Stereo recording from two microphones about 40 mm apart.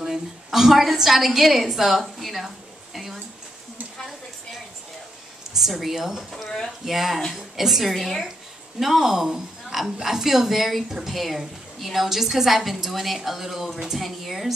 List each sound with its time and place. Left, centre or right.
0.0 s a sound: centre
0.9 s a woman's voice: centre
5.5 s a woman's voice: centre
7.9 s a woman's voice: centre
8.7 s a woman's voice: centre